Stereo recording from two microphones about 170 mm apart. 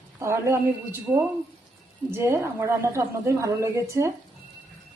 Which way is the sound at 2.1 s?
15° right (ahead or behind).